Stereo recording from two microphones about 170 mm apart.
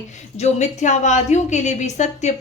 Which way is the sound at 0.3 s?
40° left (ahead or behind).